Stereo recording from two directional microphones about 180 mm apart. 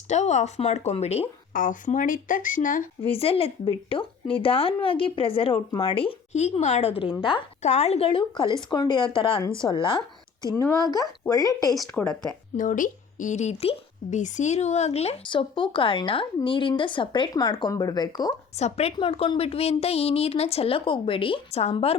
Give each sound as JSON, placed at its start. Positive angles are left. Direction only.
{"t": 0.1, "sound": "speech", "side_deg": 40}
{"t": 1.5, "sound": "speech", "side_deg": 45}
{"t": 3.1, "sound": "speech", "side_deg": 30}
{"t": 7.6, "sound": "speech", "side_deg": 40}
{"t": 10.5, "sound": "speech", "side_deg": 10}
{"t": 11.9, "sound": "speech", "side_deg": 10}
{"t": 12.5, "sound": "speech", "side_deg": 50}
{"t": 18.5, "sound": "speech", "side_deg": 35}